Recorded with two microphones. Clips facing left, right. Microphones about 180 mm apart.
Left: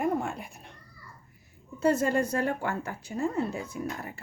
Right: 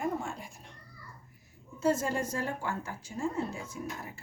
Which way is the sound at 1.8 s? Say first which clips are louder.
Left 4 dB; 65° left (ahead or behind).